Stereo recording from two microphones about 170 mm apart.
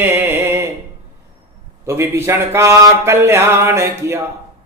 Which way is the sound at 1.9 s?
15° right (ahead or behind).